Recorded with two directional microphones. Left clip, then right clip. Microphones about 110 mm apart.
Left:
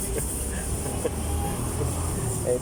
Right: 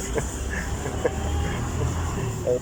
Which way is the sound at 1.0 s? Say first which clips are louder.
Right 5 dB; 25° left (ahead or behind).